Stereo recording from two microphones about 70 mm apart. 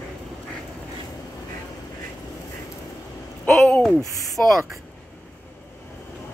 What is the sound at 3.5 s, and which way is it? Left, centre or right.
Speech, centre.